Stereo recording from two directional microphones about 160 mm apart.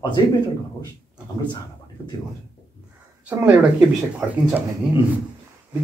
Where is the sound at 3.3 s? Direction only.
10° right (ahead or behind).